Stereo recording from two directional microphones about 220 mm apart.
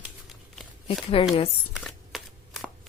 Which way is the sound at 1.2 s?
25° left (ahead or behind).